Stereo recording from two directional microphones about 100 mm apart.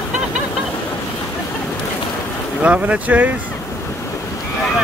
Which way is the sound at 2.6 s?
15° right (ahead or behind).